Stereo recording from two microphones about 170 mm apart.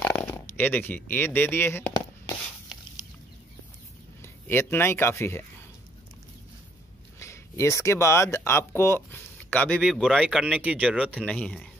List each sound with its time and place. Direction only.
0.0 s a sound: 10° left (ahead or behind)
4.2 s speech: 15° left (ahead or behind)
7.2 s speech: 15° left (ahead or behind)
9.8 s speech: centre (ahead or behind)
11.1 s speech: 5° left (ahead or behind)